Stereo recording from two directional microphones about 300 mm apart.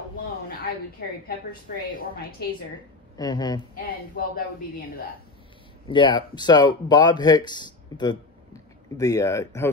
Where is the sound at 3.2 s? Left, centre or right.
Centre.